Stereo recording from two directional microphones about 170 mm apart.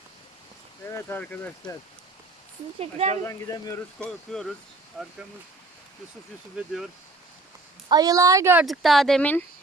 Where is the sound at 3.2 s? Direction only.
20° left (ahead or behind).